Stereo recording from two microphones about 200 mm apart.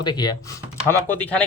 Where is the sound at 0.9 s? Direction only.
10° left (ahead or behind).